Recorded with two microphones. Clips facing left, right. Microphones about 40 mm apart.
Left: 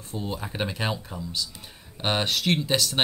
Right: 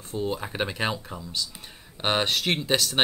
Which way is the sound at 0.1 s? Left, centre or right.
Centre.